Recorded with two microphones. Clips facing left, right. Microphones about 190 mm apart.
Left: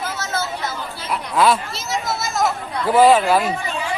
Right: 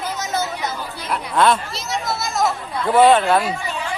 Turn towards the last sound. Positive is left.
turn(degrees=5)  # may be behind; listen again after turning